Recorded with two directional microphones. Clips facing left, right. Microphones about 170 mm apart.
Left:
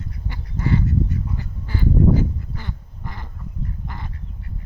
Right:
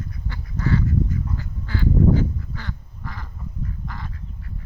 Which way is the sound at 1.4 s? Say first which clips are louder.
Even; 15° left (ahead or behind).